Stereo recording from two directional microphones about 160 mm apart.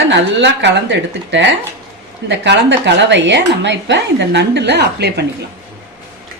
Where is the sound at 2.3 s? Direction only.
90° right.